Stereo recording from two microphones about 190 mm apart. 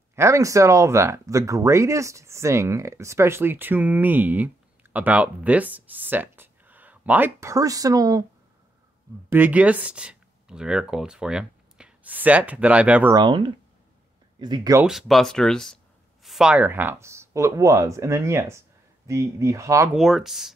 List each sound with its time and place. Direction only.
0.1 s speech: 15° right (ahead or behind)
9.3 s speech: 10° right (ahead or behind)
13.1 s speech: 25° right (ahead or behind)
14.8 s speech: centre (ahead or behind)
19.9 s speech: centre (ahead or behind)